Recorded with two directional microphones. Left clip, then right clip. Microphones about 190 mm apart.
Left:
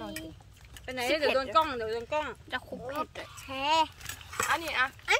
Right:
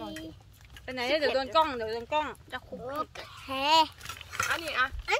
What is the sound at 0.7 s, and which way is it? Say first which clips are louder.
Speech: right 1 dB; 30° right (ahead or behind).